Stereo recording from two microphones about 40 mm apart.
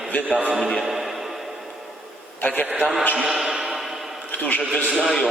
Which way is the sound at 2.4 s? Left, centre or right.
Left.